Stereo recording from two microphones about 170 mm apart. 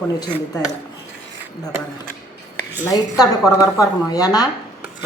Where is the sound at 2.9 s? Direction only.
20° left (ahead or behind).